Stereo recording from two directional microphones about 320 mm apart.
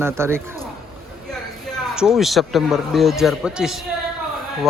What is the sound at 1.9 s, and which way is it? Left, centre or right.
A man's voice, centre.